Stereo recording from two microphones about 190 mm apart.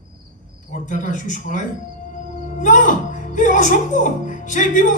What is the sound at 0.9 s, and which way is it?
Speech, 45° left (ahead or behind).